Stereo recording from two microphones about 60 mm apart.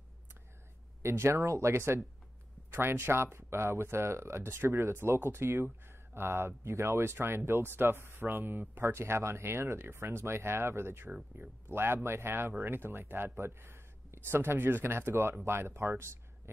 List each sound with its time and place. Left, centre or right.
1.0 s speech: right
8.8 s speech: right